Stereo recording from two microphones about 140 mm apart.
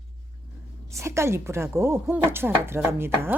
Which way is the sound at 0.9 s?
20° right (ahead or behind).